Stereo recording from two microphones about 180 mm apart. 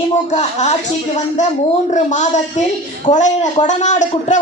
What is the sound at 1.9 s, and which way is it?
A woman's voice, 40° left (ahead or behind).